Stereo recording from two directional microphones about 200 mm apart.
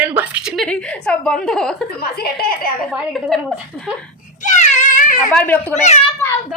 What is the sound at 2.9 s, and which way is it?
Speech, centre (ahead or behind).